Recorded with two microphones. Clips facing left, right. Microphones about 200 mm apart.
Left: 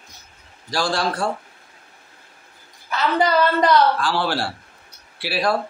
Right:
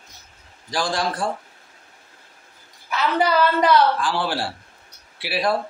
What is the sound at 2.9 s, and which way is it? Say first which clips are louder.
Speech: left 1 dB; 5° right (ahead or behind).